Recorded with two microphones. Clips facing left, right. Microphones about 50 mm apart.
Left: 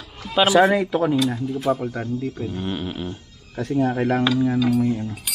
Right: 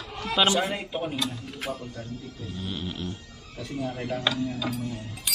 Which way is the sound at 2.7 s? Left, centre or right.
Centre.